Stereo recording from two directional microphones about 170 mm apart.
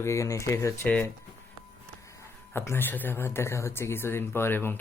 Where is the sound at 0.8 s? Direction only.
5° left (ahead or behind).